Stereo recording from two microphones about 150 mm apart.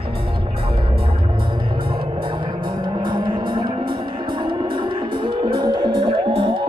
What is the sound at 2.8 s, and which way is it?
Music, 30° right (ahead or behind).